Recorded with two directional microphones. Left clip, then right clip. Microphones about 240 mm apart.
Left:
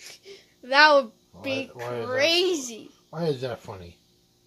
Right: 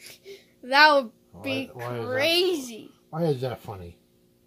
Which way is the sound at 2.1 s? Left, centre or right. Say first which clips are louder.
Left 1 dB; centre.